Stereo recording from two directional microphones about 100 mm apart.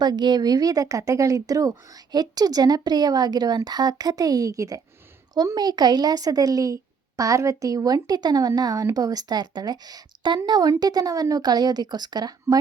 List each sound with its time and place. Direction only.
0.0 s speech: 45° right (ahead or behind)